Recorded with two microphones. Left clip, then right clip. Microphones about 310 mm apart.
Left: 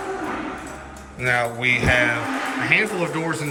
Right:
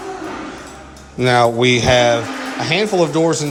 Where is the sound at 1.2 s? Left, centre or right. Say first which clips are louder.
Right 8 dB; centre.